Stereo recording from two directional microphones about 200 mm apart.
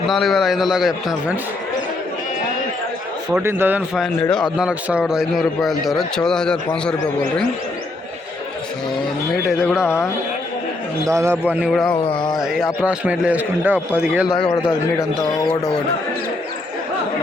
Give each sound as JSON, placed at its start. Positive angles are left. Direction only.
{"t": 0.1, "sound": "a man's voice", "side_deg": 0}
{"t": 3.4, "sound": "a man's voice", "side_deg": -10}
{"t": 9.8, "sound": "speech", "side_deg": 15}
{"t": 11.1, "sound": "a man's voice", "side_deg": -15}
{"t": 12.0, "sound": "a sound", "side_deg": 25}
{"t": 12.4, "sound": "a man's voice", "side_deg": 0}
{"t": 14.3, "sound": "speech", "side_deg": 20}